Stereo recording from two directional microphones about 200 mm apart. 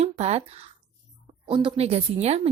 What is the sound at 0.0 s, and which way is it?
A woman's voice, 30° right (ahead or behind).